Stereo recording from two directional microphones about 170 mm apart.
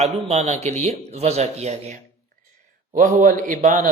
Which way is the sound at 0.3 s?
40° right (ahead or behind).